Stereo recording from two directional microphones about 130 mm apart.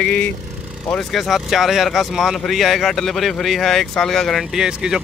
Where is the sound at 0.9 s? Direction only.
Centre (ahead or behind).